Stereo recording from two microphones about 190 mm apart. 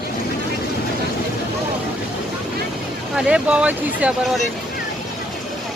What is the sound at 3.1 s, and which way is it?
Speech, 5° right (ahead or behind).